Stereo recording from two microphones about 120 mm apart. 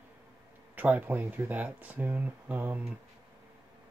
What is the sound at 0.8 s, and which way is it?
Speech, 15° right (ahead or behind).